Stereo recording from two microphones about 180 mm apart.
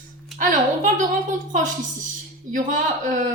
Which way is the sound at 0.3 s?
45° right (ahead or behind).